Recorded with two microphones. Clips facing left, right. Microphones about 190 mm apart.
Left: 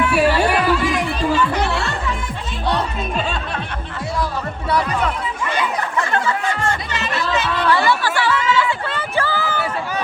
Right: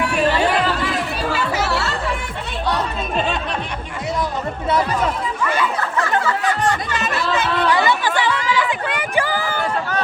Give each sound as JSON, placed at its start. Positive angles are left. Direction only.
{"t": 0.2, "sound": "music", "side_deg": 10}
{"t": 1.3, "sound": "music", "side_deg": -5}
{"t": 6.9, "sound": "chatter", "side_deg": -50}
{"t": 7.7, "sound": "chatter", "side_deg": -20}